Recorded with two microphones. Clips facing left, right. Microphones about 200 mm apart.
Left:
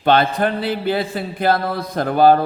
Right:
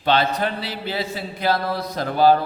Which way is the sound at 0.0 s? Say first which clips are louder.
Left 4 dB; 55° left (ahead or behind).